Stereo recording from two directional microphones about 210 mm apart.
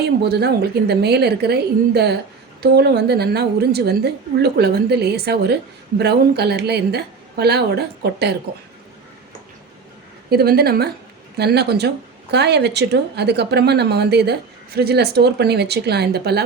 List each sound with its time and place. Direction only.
0.0 s a woman's voice: 50° right (ahead or behind)
10.2 s a woman's voice: 45° right (ahead or behind)